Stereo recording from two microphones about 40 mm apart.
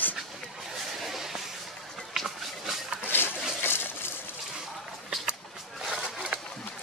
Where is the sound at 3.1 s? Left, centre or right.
Left.